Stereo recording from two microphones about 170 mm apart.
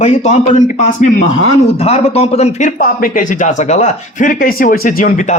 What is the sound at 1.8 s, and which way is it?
A man's voice, 35° left (ahead or behind).